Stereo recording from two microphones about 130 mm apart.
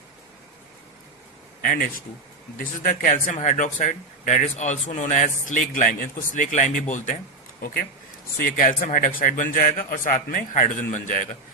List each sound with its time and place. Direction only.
1.6 s a man's voice: 90° left
6.3 s speech: 75° left (ahead or behind)
8.5 s a man's voice: 90° left